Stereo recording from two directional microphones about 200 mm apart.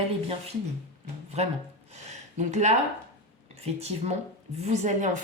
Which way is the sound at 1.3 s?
35° right (ahead or behind).